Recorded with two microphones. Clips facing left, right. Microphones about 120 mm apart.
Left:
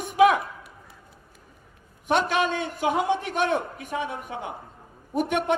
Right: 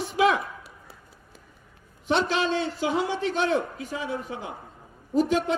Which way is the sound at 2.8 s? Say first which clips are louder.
Left 6 dB; 20° left (ahead or behind).